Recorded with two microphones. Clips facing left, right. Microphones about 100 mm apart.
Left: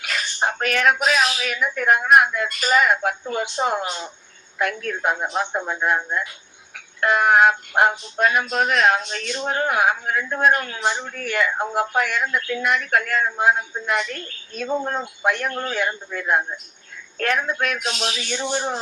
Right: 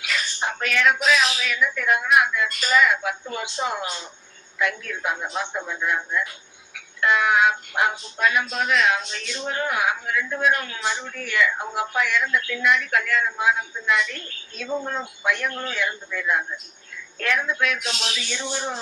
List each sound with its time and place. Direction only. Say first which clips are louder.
0.0 s speech: left 3 dB; 45° left (ahead or behind)